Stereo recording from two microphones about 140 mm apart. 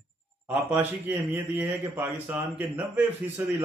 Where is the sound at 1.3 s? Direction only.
10° right (ahead or behind).